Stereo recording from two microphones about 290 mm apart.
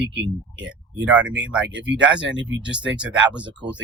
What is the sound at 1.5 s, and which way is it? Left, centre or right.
Speech, centre.